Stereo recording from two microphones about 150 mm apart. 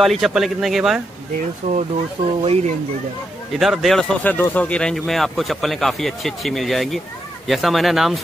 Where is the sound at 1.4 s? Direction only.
50° right (ahead or behind).